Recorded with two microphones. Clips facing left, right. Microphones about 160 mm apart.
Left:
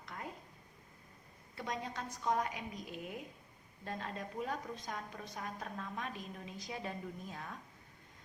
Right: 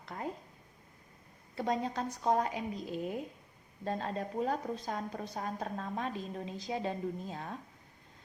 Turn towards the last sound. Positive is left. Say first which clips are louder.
# right 6 dB
turn(degrees=-30)  # may be behind; listen again after turning